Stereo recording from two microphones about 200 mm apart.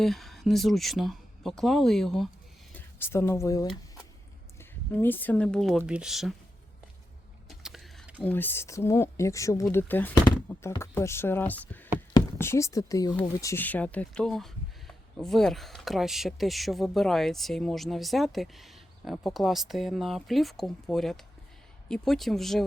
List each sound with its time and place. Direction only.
0.0 s speech: centre (ahead or behind)
2.7 s speech: 10° left (ahead or behind)
4.9 s speech: 10° left (ahead or behind)
7.6 s a sound: centre (ahead or behind)
8.2 s speech: 10° left (ahead or behind)